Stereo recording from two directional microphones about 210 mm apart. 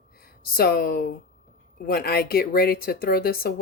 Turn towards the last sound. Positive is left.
turn(degrees=45)  # may be behind; listen again after turning